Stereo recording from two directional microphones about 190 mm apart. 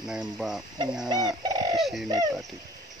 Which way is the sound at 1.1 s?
20° right (ahead or behind).